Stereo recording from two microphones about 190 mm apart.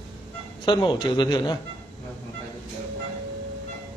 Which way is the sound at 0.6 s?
25° left (ahead or behind).